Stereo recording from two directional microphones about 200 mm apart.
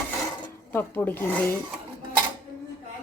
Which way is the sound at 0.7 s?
10° left (ahead or behind).